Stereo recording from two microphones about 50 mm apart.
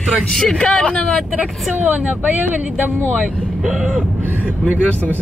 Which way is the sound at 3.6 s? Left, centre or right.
Centre.